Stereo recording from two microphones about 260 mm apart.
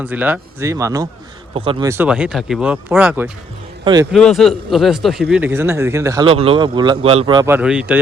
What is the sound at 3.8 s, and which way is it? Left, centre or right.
Speech, centre.